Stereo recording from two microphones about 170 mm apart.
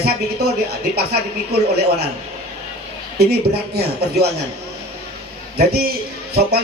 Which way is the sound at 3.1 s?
70° right (ahead or behind).